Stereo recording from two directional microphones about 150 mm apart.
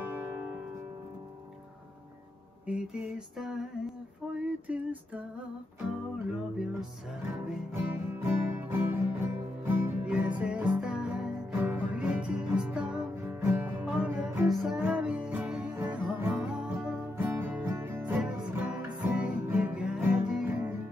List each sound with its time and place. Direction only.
0.0 s music: 15° right (ahead or behind)
2.6 s a sound: 5° right (ahead or behind)
4.4 s music: 10° right (ahead or behind)
6.2 s a sound: 5° right (ahead or behind)
7.7 s music: 15° right (ahead or behind); by 14.8 s centre (ahead or behind)
14.8 s music: 10° right (ahead or behind)